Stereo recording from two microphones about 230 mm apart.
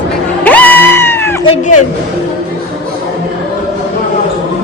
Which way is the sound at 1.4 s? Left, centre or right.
Left.